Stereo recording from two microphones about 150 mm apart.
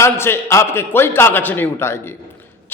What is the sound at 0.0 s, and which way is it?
A man's voice, 15° left (ahead or behind).